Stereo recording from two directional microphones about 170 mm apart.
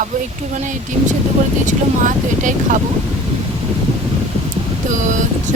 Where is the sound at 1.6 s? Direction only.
50° right (ahead or behind).